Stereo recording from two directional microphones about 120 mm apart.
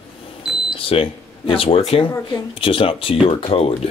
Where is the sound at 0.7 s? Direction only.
50° left (ahead or behind).